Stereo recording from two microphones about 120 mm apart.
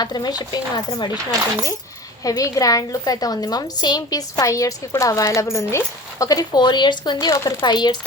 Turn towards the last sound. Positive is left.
turn(degrees=40)  # may be behind; listen again after turning